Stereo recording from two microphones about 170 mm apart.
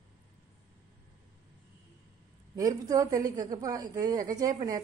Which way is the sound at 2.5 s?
20° right (ahead or behind).